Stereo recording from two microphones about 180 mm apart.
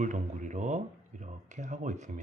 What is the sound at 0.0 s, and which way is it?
Speech, 40° right (ahead or behind).